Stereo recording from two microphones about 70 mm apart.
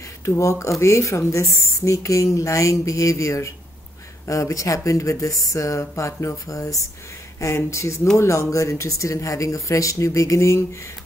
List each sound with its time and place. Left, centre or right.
0.2 s a woman's voice: left